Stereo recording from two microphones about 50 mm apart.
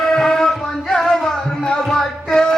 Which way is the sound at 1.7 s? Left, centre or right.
Centre.